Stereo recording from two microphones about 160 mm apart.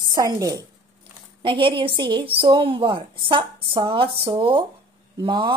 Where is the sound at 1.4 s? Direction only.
35° right (ahead or behind).